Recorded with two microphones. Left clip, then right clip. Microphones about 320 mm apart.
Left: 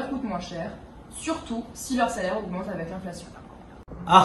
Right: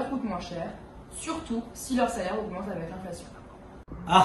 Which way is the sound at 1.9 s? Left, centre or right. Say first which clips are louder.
Left 2 dB; centre.